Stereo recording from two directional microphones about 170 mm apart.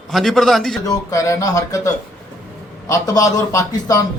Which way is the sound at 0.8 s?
20° left (ahead or behind).